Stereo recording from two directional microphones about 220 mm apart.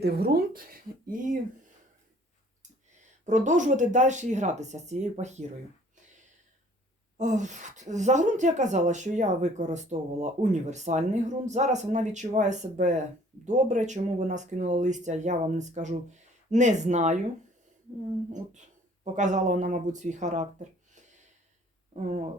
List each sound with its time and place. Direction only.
0.0 s speech: 45° right (ahead or behind)
3.0 s speech: 35° right (ahead or behind)
7.2 s speech: 35° right (ahead or behind)
19.1 s speech: 35° right (ahead or behind)